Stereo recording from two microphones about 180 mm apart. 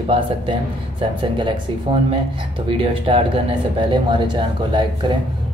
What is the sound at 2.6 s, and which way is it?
Speech, 30° right (ahead or behind).